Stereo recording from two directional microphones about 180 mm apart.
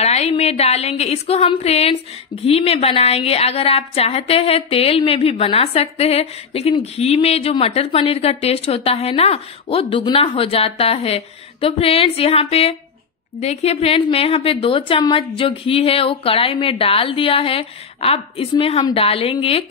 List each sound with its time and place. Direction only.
0.0 s a woman's voice: 35° left (ahead or behind)